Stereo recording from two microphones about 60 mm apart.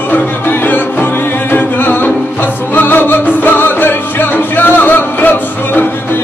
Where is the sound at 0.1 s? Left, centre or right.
Left.